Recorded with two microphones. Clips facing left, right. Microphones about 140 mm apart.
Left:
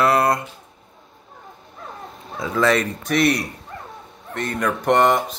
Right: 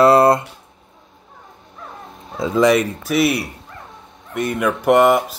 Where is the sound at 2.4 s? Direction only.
20° right (ahead or behind).